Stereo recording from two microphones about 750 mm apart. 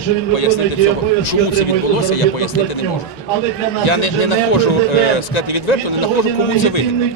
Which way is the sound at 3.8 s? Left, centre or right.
Left.